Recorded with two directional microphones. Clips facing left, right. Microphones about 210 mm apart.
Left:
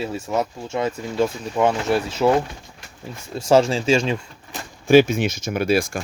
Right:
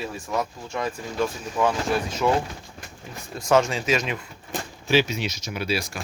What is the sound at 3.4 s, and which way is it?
Speech, 30° left (ahead or behind).